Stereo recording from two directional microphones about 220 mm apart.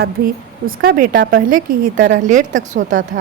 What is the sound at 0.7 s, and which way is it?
A woman's voice, 40° right (ahead or behind).